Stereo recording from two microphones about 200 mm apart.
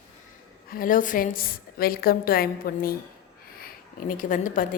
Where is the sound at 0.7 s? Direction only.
45° left (ahead or behind).